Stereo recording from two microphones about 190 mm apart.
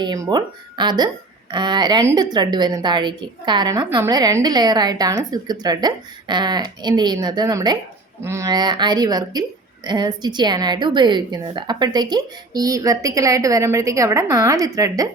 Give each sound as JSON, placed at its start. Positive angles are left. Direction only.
{"t": 0.0, "sound": "speech", "side_deg": -25}